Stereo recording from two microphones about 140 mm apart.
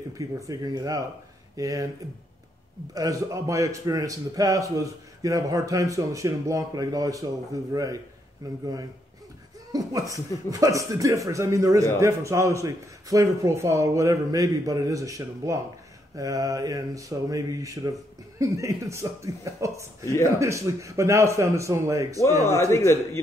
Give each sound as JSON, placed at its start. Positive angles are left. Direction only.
{"t": 0.2, "sound": "a man's voice", "side_deg": -25}
{"t": 2.9, "sound": "a man's voice", "side_deg": -25}
{"t": 9.7, "sound": "a man's voice", "side_deg": -25}
{"t": 22.5, "sound": "a man's voice", "side_deg": 20}